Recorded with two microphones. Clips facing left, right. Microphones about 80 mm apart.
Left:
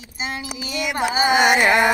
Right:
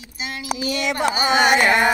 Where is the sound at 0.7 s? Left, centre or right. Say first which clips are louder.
Right 1 dB; centre.